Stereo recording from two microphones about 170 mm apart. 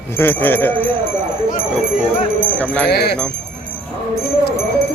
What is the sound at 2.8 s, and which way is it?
Speech, 75° left (ahead or behind).